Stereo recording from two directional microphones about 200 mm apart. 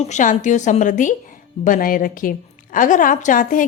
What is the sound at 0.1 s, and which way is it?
A woman's voice, 40° left (ahead or behind).